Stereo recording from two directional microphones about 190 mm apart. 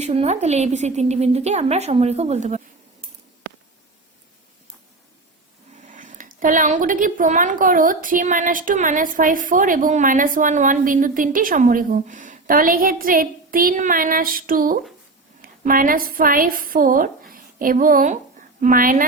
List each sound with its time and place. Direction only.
0.0 s a woman's voice: 35° right (ahead or behind)
5.8 s a woman's voice: 40° right (ahead or behind)